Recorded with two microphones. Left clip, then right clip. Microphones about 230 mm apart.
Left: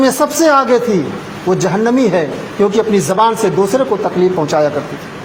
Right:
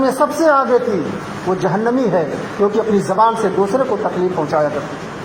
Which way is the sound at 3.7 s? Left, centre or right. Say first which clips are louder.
Left 3 dB; left.